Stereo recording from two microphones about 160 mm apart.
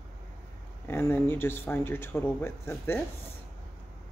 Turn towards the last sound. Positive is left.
turn(degrees=15)  # may be behind; listen again after turning